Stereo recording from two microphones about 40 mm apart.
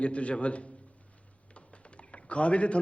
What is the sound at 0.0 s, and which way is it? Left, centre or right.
Speech, left.